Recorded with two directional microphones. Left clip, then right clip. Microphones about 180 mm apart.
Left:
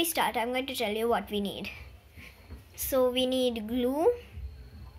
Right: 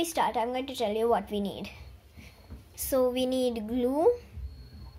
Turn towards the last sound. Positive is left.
turn(degrees=-10)  # may be behind; listen again after turning